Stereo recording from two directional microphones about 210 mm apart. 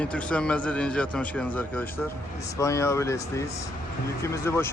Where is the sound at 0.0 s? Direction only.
5° left (ahead or behind).